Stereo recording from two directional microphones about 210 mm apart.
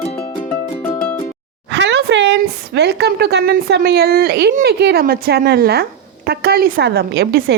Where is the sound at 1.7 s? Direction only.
55° right (ahead or behind).